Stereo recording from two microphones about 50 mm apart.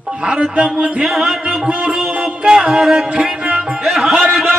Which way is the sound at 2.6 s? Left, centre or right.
Centre.